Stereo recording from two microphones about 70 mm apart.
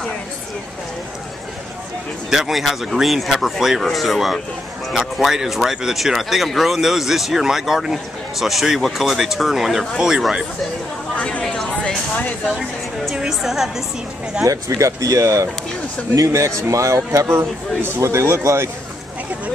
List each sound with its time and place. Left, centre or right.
2.3 s speech: centre
11.1 s a sound: centre
13.1 s a woman's voice: centre
14.4 s speech: right